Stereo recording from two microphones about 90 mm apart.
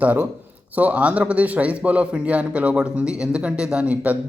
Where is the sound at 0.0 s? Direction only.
15° right (ahead or behind).